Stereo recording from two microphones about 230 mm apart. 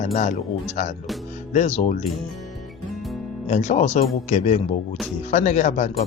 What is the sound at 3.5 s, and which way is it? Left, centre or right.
A man's voice, left.